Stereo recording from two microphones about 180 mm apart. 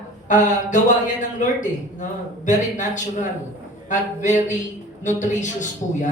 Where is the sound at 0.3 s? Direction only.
45° left (ahead or behind).